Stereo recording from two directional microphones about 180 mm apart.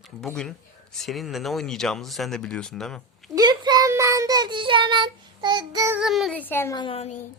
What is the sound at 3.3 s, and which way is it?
Child singing, 20° right (ahead or behind).